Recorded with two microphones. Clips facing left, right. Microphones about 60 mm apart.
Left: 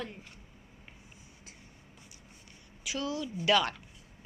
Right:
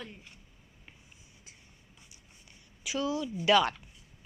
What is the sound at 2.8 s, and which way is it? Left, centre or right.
Speech, centre.